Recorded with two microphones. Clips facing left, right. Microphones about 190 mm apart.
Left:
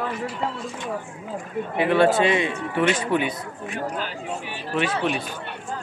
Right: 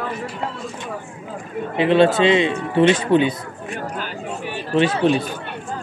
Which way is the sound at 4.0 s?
50° right (ahead or behind).